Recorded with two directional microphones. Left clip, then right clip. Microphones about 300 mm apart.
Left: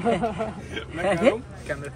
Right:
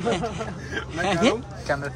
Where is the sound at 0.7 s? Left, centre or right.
Centre.